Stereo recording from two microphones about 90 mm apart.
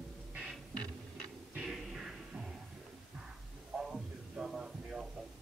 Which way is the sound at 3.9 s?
5° right (ahead or behind).